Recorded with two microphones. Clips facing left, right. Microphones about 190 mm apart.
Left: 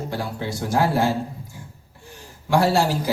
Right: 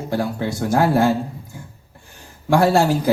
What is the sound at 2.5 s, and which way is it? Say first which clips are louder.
Speech: right 4 dB; 50° right (ahead or behind).